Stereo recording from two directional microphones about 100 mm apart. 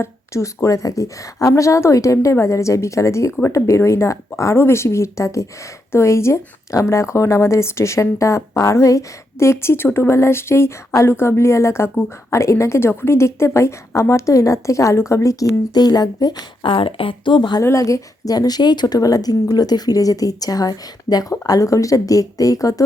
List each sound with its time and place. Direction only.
0.0 s a woman's voice: 30° left (ahead or behind)
16.6 s speech: 60° left (ahead or behind)
17.6 s a woman's voice: 30° left (ahead or behind)